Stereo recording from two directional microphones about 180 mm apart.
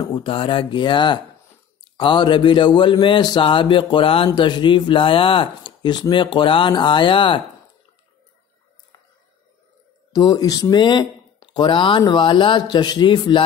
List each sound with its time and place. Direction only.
0.0 s speech: 25° left (ahead or behind)
10.1 s speech: 20° left (ahead or behind)